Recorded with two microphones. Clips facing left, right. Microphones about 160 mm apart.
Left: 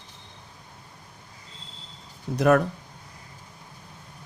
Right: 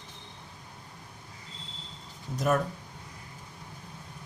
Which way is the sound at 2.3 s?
70° left (ahead or behind).